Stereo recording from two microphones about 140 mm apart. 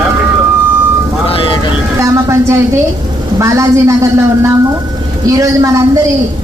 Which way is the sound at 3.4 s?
20° right (ahead or behind).